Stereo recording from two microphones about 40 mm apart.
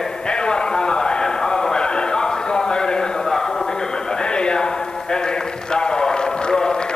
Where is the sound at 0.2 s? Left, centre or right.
Left.